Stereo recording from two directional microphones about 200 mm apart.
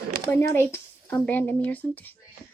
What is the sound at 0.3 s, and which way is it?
Speech, 10° left (ahead or behind).